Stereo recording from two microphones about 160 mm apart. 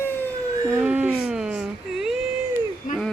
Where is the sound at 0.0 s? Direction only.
15° left (ahead or behind).